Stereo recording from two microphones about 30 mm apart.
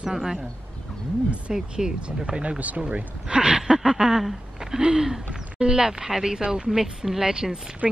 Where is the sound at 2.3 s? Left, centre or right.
Right.